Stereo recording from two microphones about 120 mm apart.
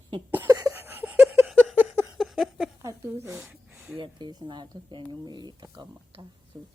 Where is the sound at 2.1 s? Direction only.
Centre (ahead or behind).